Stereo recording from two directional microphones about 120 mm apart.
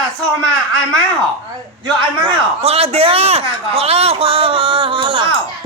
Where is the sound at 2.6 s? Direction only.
55° right (ahead or behind).